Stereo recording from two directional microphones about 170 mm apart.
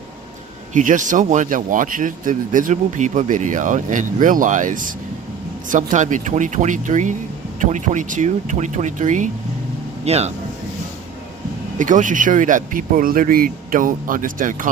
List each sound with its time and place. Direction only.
0.7 s speech: 45° right (ahead or behind)
11.8 s speech: 50° right (ahead or behind)